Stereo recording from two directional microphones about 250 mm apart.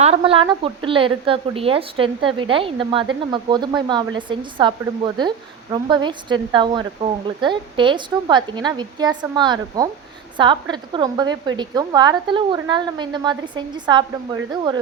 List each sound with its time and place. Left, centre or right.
0.0 s a woman's voice: right